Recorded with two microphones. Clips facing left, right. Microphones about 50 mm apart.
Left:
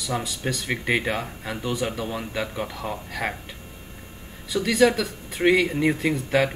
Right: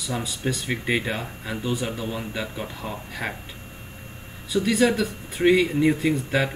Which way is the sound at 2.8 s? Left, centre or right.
Centre.